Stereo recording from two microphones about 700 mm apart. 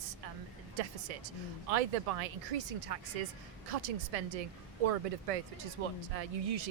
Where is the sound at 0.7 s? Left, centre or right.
Right.